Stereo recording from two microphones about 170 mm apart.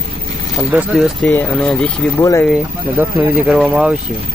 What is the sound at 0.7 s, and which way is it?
Speech, centre (ahead or behind).